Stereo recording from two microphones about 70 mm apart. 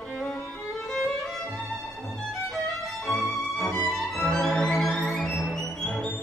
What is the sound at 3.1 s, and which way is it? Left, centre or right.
Music, centre.